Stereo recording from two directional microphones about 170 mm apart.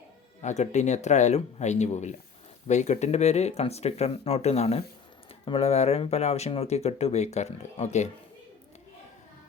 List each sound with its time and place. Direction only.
0.4 s speech: 45° left (ahead or behind)